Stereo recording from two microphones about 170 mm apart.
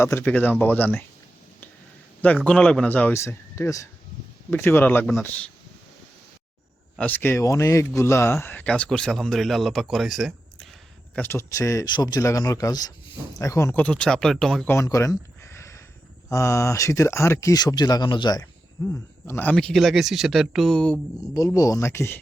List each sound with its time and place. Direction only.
0.0 s speech: 15° left (ahead or behind)
2.2 s speech: 10° left (ahead or behind)
6.9 s a man's voice: 10° left (ahead or behind)
11.1 s a man's voice: 10° left (ahead or behind)
14.7 s a sound: 15° left (ahead or behind)
16.3 s speech: 15° left (ahead or behind)
18.9 s a man's voice: 10° left (ahead or behind)
21.3 s speech: 20° left (ahead or behind)